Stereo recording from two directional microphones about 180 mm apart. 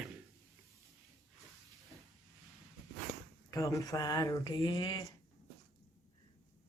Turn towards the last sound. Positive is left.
turn(degrees=25)  # may be behind; listen again after turning